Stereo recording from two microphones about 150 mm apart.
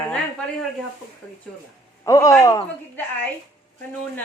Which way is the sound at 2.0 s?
20° left (ahead or behind).